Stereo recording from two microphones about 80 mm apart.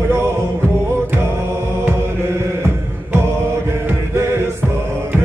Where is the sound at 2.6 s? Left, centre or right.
Right.